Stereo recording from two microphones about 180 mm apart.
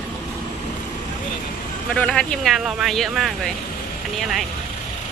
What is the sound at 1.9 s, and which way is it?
Speech, 5° left (ahead or behind).